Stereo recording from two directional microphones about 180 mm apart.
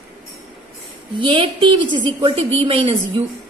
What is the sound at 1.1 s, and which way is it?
A woman's voice, 25° right (ahead or behind).